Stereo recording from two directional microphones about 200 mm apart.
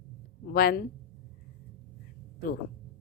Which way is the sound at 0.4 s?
50° left (ahead or behind).